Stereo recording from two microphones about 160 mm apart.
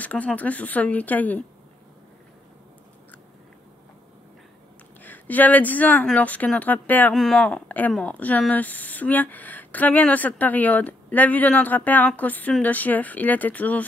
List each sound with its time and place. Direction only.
0.0 s speech: 10° left (ahead or behind)
5.0 s speech: 10° left (ahead or behind)